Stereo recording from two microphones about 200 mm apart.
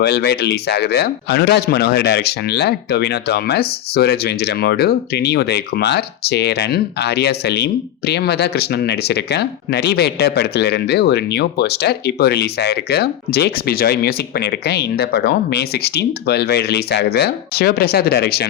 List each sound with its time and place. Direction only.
0.0 s speech: 55° left (ahead or behind)